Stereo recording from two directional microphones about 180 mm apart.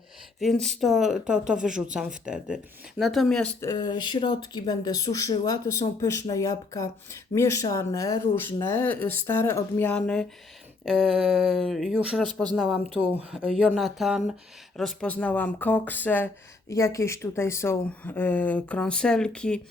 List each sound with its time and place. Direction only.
0.3 s speech: centre (ahead or behind)
3.6 s speech: 20° left (ahead or behind); by 12.3 s centre (ahead or behind)
12.3 s speech: 25° right (ahead or behind)
12.5 s speech: 5° right (ahead or behind)
12.9 s speech: 30° right (ahead or behind)
13.3 s speech: centre (ahead or behind)